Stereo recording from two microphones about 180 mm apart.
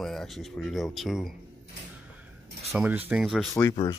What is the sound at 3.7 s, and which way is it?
Speech, 25° left (ahead or behind).